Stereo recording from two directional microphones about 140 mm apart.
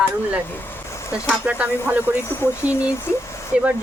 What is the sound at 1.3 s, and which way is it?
Speech, 10° right (ahead or behind).